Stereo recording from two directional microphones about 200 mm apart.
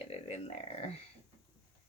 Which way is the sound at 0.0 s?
30° left (ahead or behind).